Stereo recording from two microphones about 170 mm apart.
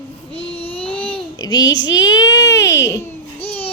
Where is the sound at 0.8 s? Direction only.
5° left (ahead or behind).